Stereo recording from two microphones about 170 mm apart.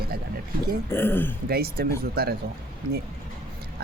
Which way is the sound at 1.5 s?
65° right (ahead or behind).